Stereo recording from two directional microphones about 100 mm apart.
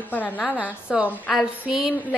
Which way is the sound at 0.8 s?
10° right (ahead or behind).